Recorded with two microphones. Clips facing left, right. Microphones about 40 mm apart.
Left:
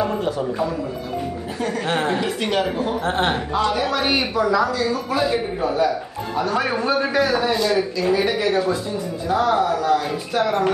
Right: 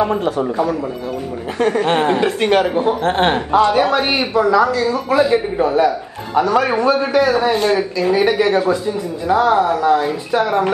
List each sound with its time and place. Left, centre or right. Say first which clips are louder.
0.0 s speech: right 5 dB; right
0.4 s speech: right 5 dB; right
1.8 s speech: right 5 dB; right
6.3 s a man's voice: right 7 dB; right
9.6 s speech: right 5 dB; right